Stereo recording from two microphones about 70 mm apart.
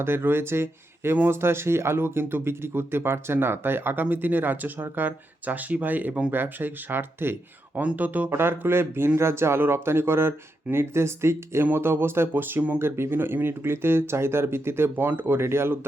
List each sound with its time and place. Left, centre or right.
0.0 s speech: right